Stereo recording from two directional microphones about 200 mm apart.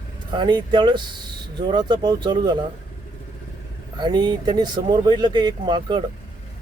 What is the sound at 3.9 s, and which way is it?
Speech, 20° right (ahead or behind).